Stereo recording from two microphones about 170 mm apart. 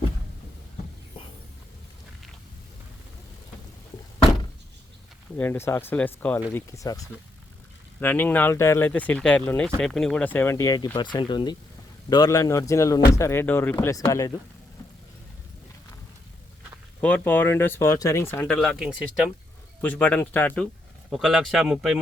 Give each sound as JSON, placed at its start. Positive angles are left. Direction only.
{"t": 5.4, "sound": "speech", "side_deg": 15}
{"t": 17.0, "sound": "speech", "side_deg": 10}
{"t": 18.4, "sound": "speech", "side_deg": 5}
{"t": 19.8, "sound": "speech", "side_deg": 10}
{"t": 21.1, "sound": "speech", "side_deg": 0}